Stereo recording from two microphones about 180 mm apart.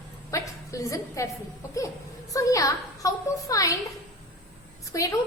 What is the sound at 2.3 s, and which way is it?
A woman's voice, 20° left (ahead or behind).